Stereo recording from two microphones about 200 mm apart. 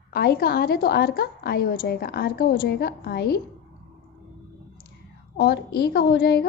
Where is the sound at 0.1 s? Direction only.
50° left (ahead or behind).